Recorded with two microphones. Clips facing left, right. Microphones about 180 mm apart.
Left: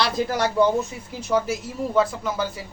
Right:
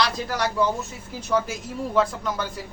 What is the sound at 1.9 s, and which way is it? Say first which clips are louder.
Speech: left 1 dB; 5° left (ahead or behind).